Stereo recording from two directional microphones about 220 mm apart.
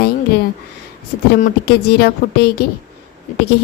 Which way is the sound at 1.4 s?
45° left (ahead or behind).